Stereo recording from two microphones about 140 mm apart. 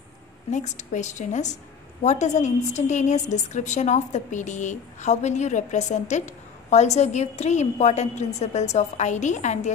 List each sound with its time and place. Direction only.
0.5 s a woman's voice: 60° left (ahead or behind)